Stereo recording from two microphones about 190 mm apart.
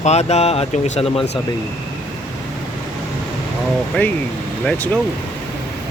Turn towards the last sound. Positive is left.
turn(degrees=5)  # may be behind; listen again after turning